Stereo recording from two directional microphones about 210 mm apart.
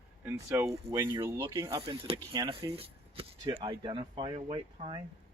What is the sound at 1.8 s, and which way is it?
Speech, 25° right (ahead or behind).